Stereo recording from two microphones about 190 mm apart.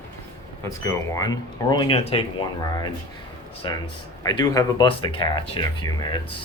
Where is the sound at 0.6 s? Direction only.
15° left (ahead or behind).